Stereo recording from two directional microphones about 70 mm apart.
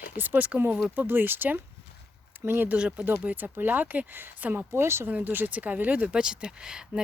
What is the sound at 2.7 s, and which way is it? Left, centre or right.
Speech, centre.